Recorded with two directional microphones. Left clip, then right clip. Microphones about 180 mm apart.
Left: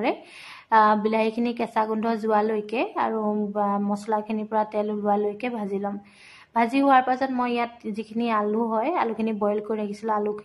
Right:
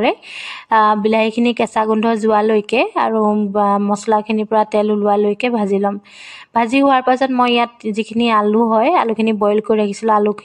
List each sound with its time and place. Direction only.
0.7 s a woman's voice: 40° right (ahead or behind)